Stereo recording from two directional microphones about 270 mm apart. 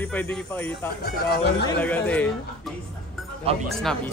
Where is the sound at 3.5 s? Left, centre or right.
Right.